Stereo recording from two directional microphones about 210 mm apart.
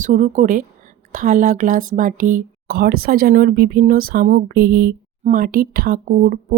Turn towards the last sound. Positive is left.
turn(degrees=-40)  # may be behind; listen again after turning